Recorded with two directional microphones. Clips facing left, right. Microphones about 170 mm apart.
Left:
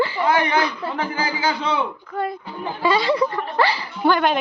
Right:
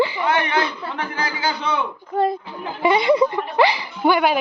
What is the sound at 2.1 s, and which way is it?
Speech, 30° right (ahead or behind).